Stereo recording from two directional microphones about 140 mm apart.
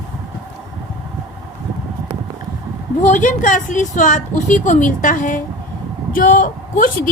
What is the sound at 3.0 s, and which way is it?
A woman's voice, 65° left (ahead or behind).